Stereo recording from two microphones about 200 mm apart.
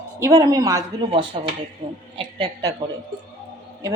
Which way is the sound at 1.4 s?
30° right (ahead or behind).